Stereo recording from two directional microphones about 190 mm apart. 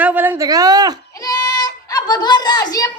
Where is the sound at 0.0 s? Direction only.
10° right (ahead or behind).